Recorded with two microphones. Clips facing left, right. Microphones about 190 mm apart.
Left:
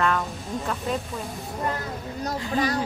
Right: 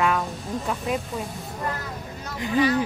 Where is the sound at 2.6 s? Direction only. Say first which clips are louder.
Right 5 dB; 40° left (ahead or behind).